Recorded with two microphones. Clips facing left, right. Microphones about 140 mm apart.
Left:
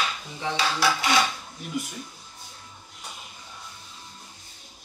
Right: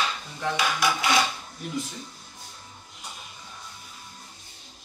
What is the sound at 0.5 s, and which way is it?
Dishes, 15° right (ahead or behind).